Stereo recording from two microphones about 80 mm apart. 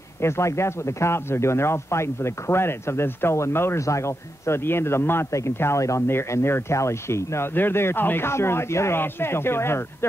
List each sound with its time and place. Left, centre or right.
0.2 s speech: left